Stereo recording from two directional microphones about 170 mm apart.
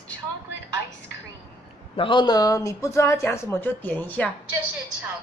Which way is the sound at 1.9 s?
30° left (ahead or behind).